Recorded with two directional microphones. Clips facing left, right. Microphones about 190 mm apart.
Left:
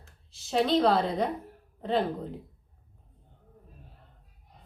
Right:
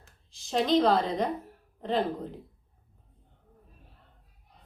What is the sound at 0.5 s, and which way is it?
A woman's voice, centre (ahead or behind).